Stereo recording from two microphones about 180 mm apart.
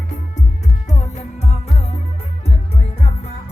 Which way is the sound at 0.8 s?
40° left (ahead or behind).